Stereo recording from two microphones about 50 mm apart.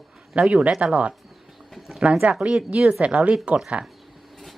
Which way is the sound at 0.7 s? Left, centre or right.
Centre.